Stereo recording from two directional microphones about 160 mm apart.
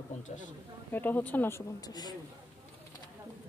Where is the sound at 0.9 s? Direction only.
10° left (ahead or behind).